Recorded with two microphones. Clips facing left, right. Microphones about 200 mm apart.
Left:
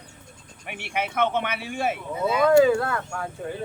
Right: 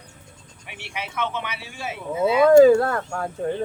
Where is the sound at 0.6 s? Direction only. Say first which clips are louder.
Left 5 dB; 55° left (ahead or behind).